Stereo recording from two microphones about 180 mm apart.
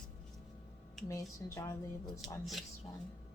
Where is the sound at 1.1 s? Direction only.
20° left (ahead or behind).